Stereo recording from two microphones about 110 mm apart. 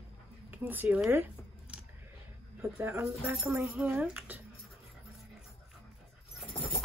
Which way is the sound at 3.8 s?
15° right (ahead or behind).